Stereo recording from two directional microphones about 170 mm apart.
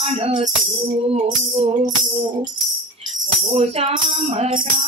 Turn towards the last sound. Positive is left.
turn(degrees=-30)  # may be behind; listen again after turning